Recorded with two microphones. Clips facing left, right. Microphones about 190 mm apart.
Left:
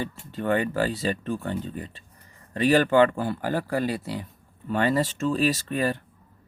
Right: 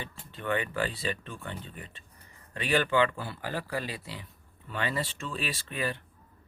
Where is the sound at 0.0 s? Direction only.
40° left (ahead or behind).